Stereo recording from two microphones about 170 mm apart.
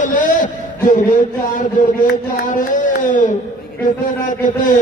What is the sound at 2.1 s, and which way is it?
Speech, 50° left (ahead or behind).